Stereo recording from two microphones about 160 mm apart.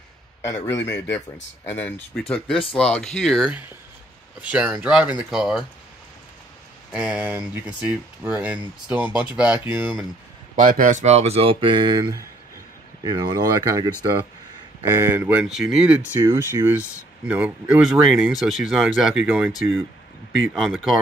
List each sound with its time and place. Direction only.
0.4 s a man's voice: 20° left (ahead or behind); by 5.7 s centre (ahead or behind)
6.9 s speech: 5° right (ahead or behind)
10.5 s speech: 55° right (ahead or behind); by 13.9 s 25° right (ahead or behind)
15.0 s speech: 15° right (ahead or behind)
20.5 s speech: centre (ahead or behind)